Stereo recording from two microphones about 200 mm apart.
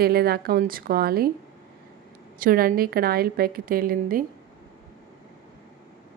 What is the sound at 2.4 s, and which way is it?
Speech, 45° right (ahead or behind).